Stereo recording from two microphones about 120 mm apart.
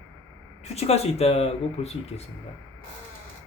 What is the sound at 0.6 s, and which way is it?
Speech, 60° left (ahead or behind).